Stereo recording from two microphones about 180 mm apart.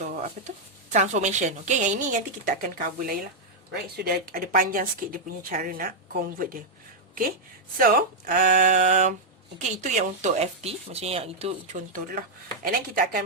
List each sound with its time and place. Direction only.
0.0 s a sound: 40° right (ahead or behind)
0.9 s speech: 40° right (ahead or behind)
7.8 s speech: 55° right (ahead or behind); by 11.8 s 35° right (ahead or behind)
11.9 s speech: 55° right (ahead or behind)